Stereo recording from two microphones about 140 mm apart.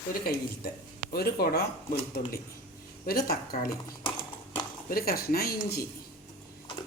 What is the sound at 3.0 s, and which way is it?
Speech, 90° left.